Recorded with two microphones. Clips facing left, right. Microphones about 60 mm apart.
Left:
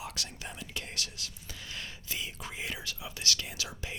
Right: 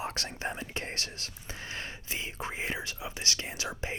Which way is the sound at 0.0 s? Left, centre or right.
Right.